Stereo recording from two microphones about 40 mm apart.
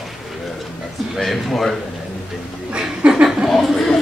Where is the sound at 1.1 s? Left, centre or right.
Centre.